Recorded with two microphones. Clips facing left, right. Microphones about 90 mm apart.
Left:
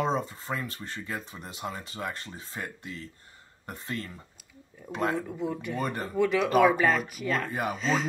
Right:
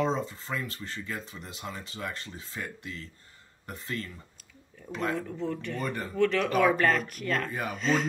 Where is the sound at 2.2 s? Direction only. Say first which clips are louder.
Left 1 dB; 35° left (ahead or behind).